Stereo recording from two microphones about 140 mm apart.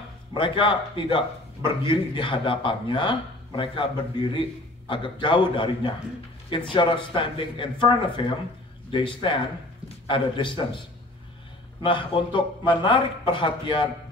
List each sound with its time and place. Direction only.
0.3 s a man's voice: 35° left (ahead or behind)
11.8 s a man's voice: 35° left (ahead or behind)